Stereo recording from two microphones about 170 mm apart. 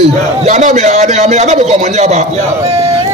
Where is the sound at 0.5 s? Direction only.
45° right (ahead or behind).